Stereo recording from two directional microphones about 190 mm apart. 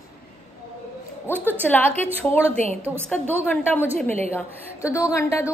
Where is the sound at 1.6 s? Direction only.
10° left (ahead or behind).